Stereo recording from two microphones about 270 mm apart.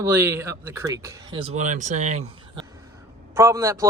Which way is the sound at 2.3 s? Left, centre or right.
Centre.